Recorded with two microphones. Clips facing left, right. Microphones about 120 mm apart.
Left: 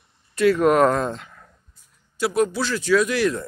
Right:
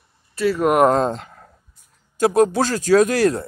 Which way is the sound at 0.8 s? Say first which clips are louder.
Right 4 dB; 30° right (ahead or behind).